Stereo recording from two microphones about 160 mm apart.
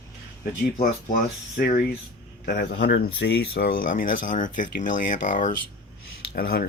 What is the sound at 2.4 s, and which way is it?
Speech, 70° left (ahead or behind).